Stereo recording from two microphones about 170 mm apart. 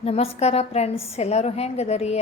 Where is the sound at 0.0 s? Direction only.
35° left (ahead or behind).